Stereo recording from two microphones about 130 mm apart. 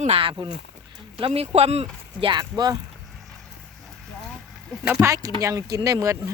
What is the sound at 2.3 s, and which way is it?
Speech, 30° right (ahead or behind).